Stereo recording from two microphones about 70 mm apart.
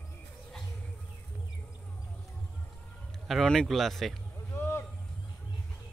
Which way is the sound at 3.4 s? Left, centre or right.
Centre.